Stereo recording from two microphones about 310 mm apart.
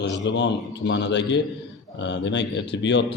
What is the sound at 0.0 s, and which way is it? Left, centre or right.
A man's voice, left.